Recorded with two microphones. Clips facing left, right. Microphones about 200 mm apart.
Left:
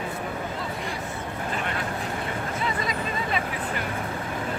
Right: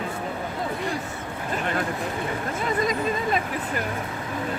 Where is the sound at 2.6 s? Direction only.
45° right (ahead or behind).